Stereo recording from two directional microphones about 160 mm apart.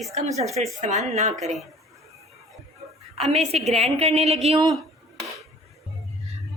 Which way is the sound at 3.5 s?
40° right (ahead or behind).